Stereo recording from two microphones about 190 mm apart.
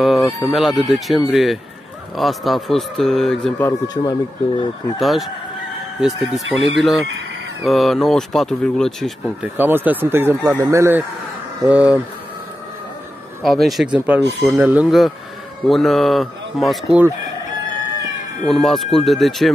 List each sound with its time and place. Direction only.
0.0 s fowl: centre (ahead or behind)
0.5 s speech: centre (ahead or behind)
3.5 s speech: 15° left (ahead or behind)
4.9 s speech: centre (ahead or behind)
9.6 s speech: 10° right (ahead or behind)
13.4 s speech: centre (ahead or behind)
18.5 s speech: centre (ahead or behind)